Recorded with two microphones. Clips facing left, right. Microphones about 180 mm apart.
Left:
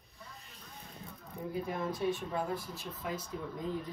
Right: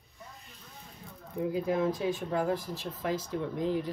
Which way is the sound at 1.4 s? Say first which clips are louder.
Right 8 dB; 90° right.